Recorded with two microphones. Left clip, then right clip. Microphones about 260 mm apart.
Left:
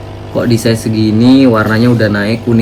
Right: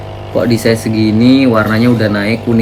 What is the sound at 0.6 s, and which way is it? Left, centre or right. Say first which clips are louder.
Speech: right 1 dB; left.